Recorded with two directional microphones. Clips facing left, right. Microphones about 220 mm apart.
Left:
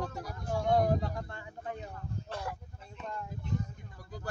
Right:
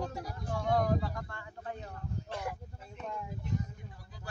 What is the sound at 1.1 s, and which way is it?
Speech, 20° left (ahead or behind).